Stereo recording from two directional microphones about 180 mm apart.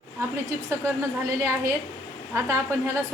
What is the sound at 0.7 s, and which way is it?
A woman's voice, 15° right (ahead or behind).